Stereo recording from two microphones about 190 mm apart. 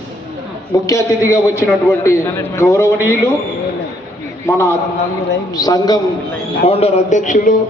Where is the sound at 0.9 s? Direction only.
15° left (ahead or behind).